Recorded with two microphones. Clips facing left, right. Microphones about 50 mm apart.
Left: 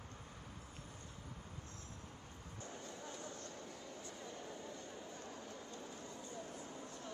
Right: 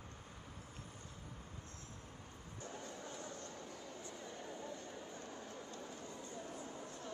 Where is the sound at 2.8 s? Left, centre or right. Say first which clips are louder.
Right 1 dB; right.